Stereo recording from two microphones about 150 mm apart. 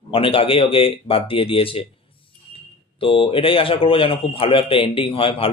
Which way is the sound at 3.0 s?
35° left (ahead or behind).